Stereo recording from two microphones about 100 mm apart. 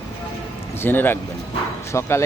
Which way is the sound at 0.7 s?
20° left (ahead or behind).